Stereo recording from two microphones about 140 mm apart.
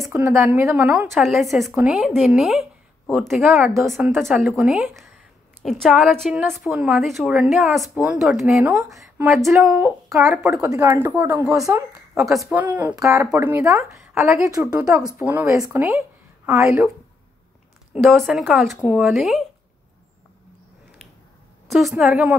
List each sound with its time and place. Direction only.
0.0 s a woman's voice: 20° right (ahead or behind)
1.1 s a woman's voice: centre (ahead or behind)
3.4 s speech: 15° right (ahead or behind)
3.8 s a woman's voice: centre (ahead or behind)
10.0 s speech: centre (ahead or behind)
10.5 s a woman's voice: 20° right (ahead or behind)
12.1 s a woman's voice: centre (ahead or behind)
12.9 s a woman's voice: 25° right (ahead or behind)
13.9 s a sound: 5° right (ahead or behind)
14.3 s a woman's voice: 20° right (ahead or behind)
14.7 s a woman's voice: 5° right (ahead or behind)
17.9 s a woman's voice: centre (ahead or behind)
21.6 s a woman's voice: 5° right (ahead or behind)